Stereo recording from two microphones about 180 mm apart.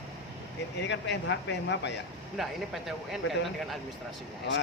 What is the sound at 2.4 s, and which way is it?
Speech, centre (ahead or behind).